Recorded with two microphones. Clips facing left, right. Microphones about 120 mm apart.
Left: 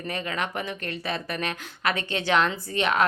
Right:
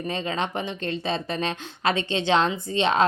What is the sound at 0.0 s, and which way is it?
Speech, 25° right (ahead or behind).